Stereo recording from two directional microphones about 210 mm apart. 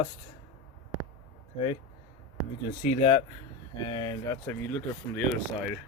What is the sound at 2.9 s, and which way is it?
Speech, 30° left (ahead or behind).